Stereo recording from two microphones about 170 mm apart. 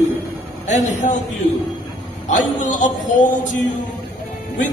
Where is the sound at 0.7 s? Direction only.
45° left (ahead or behind).